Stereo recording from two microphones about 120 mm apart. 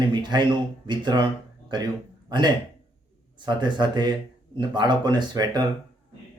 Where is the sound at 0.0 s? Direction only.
40° right (ahead or behind).